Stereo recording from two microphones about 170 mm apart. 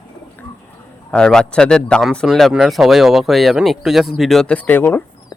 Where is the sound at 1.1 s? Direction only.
5° left (ahead or behind).